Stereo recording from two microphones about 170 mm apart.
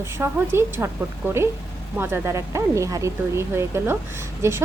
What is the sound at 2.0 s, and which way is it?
A woman's voice, 15° right (ahead or behind).